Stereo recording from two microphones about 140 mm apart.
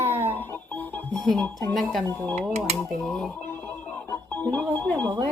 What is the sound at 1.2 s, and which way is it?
Speech, 5° left (ahead or behind).